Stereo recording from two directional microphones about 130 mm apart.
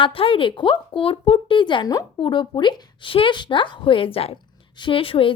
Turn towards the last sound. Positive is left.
turn(degrees=45)  # may be behind; listen again after turning